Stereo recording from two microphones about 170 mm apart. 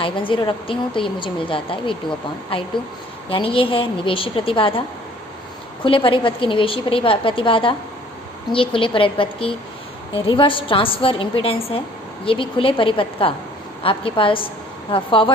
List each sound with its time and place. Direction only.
0.0 s a woman's voice: 30° left (ahead or behind)
5.8 s a woman's voice: 30° left (ahead or behind)